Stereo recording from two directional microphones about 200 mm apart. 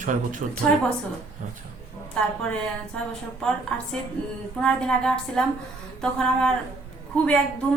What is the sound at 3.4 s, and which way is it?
A woman's voice, 5° left (ahead or behind).